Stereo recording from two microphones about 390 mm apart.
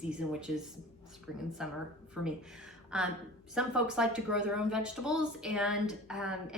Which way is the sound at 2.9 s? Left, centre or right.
Centre.